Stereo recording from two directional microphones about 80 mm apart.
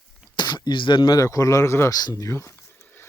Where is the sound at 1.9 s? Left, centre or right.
Left.